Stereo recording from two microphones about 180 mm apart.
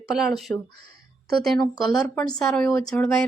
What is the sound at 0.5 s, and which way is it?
Speech, 15° left (ahead or behind).